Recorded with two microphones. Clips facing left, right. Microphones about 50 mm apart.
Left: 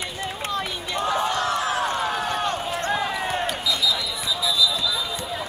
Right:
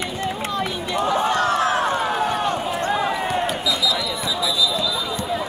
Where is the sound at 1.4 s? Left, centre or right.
Right.